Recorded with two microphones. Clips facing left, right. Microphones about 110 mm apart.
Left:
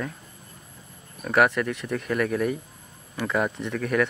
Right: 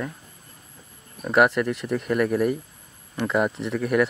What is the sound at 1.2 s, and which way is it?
Speech, 5° right (ahead or behind).